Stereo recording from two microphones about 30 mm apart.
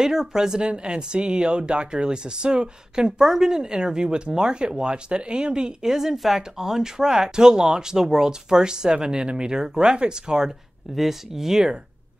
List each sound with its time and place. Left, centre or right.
0.0 s speech: centre
0.7 s speech: right
6.1 s speech: centre; by 10.5 s right
11.0 s speech: centre